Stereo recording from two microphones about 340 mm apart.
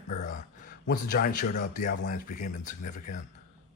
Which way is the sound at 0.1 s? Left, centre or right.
Left.